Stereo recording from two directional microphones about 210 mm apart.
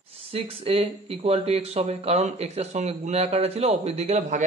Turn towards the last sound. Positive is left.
turn(degrees=-35)  # may be behind; listen again after turning